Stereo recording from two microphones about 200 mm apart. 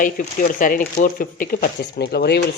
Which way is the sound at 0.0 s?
40° left (ahead or behind).